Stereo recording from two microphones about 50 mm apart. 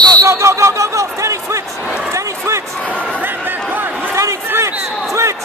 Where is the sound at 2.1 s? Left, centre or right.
Right.